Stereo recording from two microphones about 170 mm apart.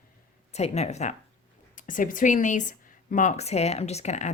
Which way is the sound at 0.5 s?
40° left (ahead or behind).